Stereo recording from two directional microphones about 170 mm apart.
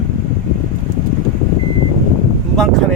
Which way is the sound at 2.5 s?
5° left (ahead or behind).